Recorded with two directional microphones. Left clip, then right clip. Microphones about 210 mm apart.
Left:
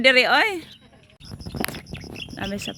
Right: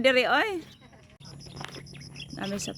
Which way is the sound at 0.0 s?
Centre (ahead or behind).